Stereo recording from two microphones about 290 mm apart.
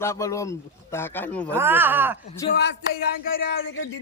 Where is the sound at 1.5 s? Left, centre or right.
Centre.